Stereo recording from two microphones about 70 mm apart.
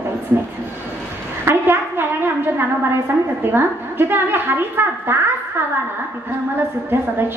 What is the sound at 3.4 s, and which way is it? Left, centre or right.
A woman's voice, right.